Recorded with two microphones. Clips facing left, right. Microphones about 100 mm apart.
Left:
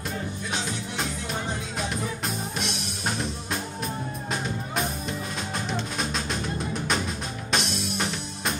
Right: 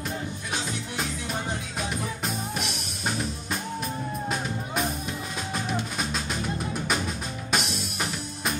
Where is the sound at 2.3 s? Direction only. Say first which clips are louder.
Even; centre (ahead or behind).